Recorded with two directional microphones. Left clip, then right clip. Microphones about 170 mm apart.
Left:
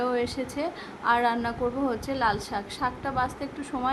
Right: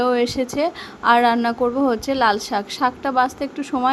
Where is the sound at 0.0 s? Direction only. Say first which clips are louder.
Right 9 dB; 40° right (ahead or behind).